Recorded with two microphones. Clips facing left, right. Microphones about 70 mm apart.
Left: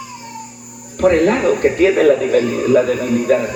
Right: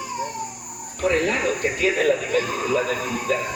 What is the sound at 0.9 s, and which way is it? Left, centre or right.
A man's voice, left.